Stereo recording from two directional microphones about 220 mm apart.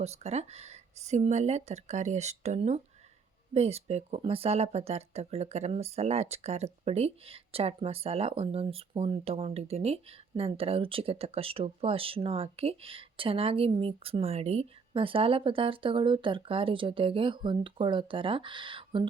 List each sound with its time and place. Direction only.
0.0 s speech: 30° right (ahead or behind)